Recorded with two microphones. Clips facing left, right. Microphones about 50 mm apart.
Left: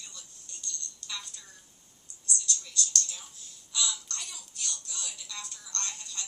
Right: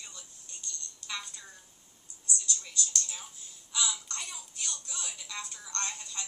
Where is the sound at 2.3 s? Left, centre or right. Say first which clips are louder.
Left 2 dB; centre.